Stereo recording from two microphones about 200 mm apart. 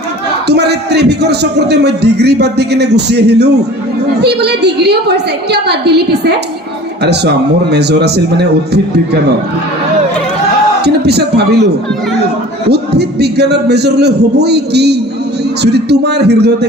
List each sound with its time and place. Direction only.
0.4 s a man's voice: 55° right (ahead or behind)
10.8 s a man's voice: 55° right (ahead or behind)
12.7 s a man's voice: 55° right (ahead or behind)